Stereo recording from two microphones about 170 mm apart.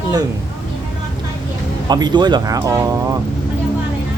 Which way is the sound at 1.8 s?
25° right (ahead or behind).